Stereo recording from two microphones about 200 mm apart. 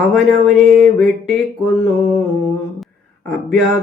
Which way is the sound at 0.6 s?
35° right (ahead or behind).